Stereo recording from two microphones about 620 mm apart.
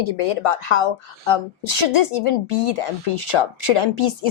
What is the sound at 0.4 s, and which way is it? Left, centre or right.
A woman's voice, left.